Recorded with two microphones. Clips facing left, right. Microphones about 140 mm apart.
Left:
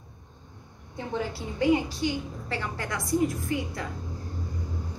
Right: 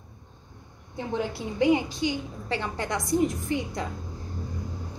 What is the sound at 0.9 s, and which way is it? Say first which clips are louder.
A woman's voice: right 2 dB; 20° right (ahead or behind).